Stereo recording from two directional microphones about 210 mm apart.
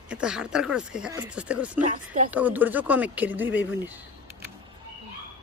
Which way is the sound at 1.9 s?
40° right (ahead or behind).